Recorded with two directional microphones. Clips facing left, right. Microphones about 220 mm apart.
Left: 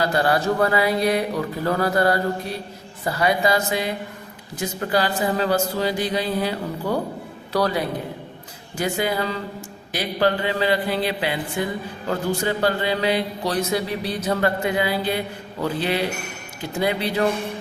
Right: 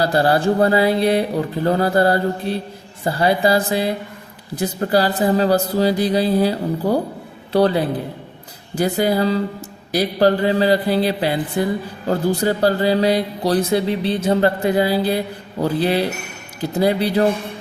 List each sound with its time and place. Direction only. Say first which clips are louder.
0.0 s a man's voice: right 4 dB; 35° right (ahead or behind)